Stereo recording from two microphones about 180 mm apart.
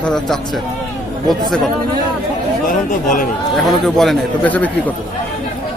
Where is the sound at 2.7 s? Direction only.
45° left (ahead or behind).